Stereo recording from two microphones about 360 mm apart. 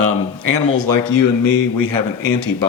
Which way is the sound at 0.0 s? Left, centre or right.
Right.